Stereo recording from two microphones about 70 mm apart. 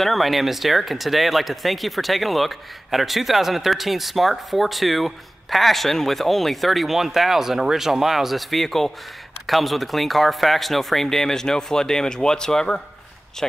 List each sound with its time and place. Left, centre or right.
0.0 s speech: centre